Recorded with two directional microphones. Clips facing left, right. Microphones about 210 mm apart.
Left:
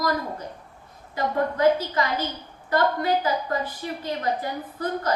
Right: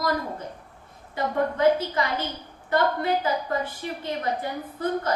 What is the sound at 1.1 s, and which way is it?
A woman's voice, 25° right (ahead or behind).